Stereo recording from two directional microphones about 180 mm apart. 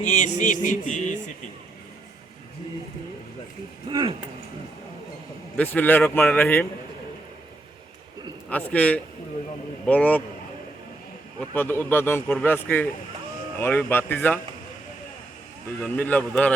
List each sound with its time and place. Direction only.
0.0 s a sound: 40° left (ahead or behind)
3.8 s speech: 25° right (ahead or behind)
5.5 s speech: 10° left (ahead or behind)
8.4 s speech: 10° left (ahead or behind)
11.3 s speech: 10° left (ahead or behind)
15.8 s speech: 10° left (ahead or behind)